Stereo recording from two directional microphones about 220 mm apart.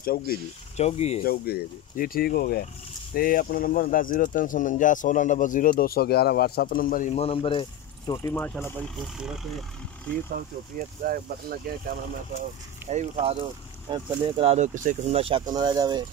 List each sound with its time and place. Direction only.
0.0 s speech: 40° left (ahead or behind)
0.7 s speech: 30° left (ahead or behind)
1.2 s speech: 45° left (ahead or behind); by 7.6 s 25° left (ahead or behind)
8.1 s speech: 15° left (ahead or behind)
11.1 s speech: 40° right (ahead or behind)
12.9 s speech: 30° right (ahead or behind)